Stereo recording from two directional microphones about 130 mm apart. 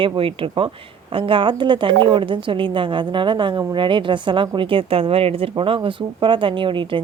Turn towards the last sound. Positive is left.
turn(degrees=-40)  # may be behind; listen again after turning